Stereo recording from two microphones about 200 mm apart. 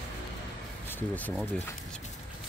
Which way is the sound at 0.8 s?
10° left (ahead or behind).